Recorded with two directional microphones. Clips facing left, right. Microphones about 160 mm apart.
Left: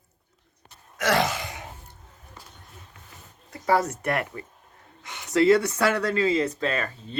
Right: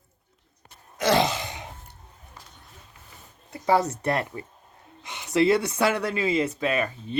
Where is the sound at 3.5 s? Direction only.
25° right (ahead or behind).